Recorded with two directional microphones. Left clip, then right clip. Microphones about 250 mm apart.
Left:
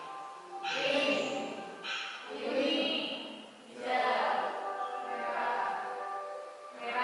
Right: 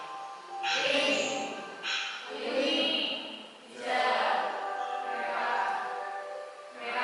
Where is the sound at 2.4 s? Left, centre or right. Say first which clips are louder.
Right 3 dB; centre.